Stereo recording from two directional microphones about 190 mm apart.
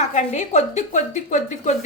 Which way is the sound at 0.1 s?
40° left (ahead or behind).